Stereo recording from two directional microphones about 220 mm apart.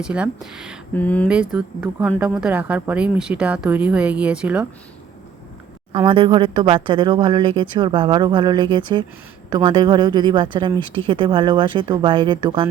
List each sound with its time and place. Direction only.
0.0 s speech: 5° right (ahead or behind)
1.3 s speech: 5° right (ahead or behind)
5.9 s speech: 20° right (ahead or behind)